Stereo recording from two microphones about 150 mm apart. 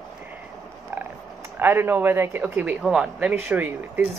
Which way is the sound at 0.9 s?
15° right (ahead or behind).